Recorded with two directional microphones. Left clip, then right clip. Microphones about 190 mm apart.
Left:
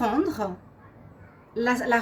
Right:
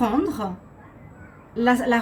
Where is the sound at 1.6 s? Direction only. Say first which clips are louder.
Right 4 dB; 40° left (ahead or behind).